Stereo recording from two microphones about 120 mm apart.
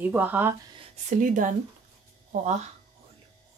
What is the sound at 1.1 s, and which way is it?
Speech, 90° right.